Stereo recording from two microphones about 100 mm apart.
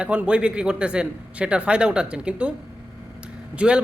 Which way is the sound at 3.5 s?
10° right (ahead or behind).